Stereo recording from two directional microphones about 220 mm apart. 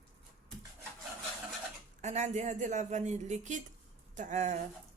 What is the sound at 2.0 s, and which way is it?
A woman's voice, 30° right (ahead or behind).